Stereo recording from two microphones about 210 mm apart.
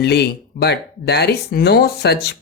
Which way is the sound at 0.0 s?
50° left (ahead or behind).